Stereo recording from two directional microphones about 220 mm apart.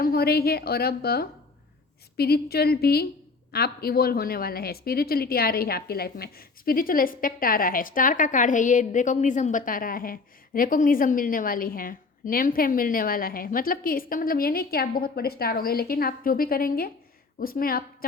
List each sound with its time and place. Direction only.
0.0 s a woman's voice: 45° left (ahead or behind)